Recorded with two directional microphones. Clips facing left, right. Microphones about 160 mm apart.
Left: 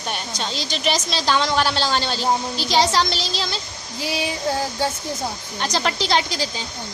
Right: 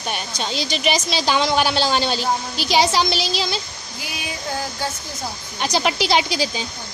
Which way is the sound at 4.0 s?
30° left (ahead or behind).